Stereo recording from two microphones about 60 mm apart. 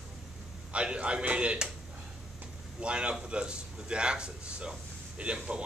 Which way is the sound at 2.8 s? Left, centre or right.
Centre.